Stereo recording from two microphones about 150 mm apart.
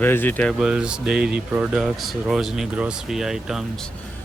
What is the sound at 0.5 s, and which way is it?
Speech, 5° right (ahead or behind).